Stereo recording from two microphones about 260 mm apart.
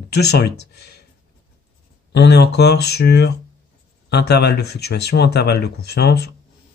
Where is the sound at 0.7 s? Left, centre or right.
Left.